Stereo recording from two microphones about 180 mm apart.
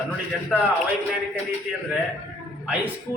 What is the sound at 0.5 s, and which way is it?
Speech, centre (ahead or behind).